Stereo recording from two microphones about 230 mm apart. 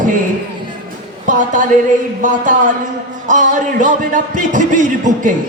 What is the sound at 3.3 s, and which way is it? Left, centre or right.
Speech, right.